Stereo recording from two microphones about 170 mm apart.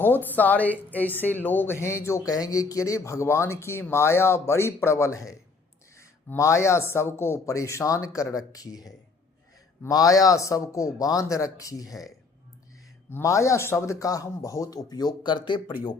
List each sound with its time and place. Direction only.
0.3 s a man's voice: 10° left (ahead or behind)
13.1 s a man's voice: 15° left (ahead or behind)